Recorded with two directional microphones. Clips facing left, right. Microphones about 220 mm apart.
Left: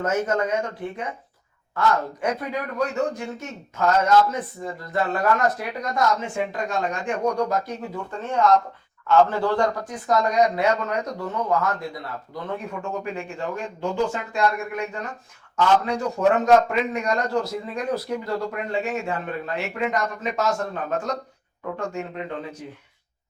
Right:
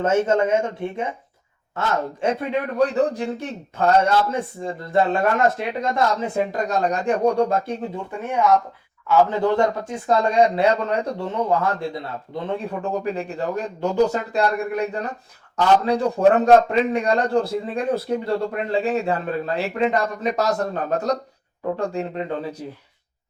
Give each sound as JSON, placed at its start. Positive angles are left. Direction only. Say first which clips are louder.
{"t": 0.0, "sound": "a man's voice", "louder": "right 5 dB", "side_deg": -25}
{"t": 8.1, "sound": "speech", "louder": "even", "side_deg": -10}